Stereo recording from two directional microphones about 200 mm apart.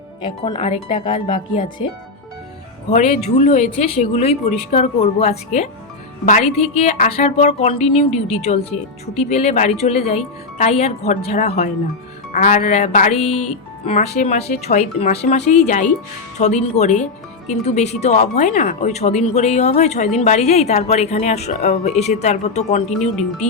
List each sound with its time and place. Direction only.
0.4 s speech: 30° left (ahead or behind)
3.2 s speech: 35° left (ahead or behind)